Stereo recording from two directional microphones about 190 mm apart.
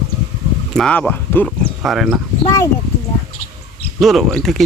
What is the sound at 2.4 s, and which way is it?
Speech, 15° left (ahead or behind).